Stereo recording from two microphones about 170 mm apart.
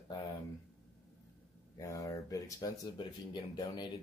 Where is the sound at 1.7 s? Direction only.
20° left (ahead or behind).